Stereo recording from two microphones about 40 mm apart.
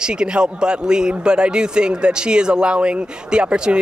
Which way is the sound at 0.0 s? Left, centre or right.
Right.